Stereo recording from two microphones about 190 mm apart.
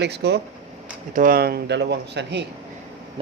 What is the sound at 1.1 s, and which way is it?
Speech, 50° right (ahead or behind).